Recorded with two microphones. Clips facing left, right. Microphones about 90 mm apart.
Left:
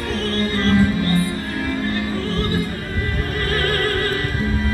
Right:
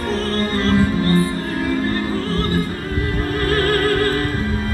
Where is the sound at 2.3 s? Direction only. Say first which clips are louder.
Right 2 dB; 40° right (ahead or behind).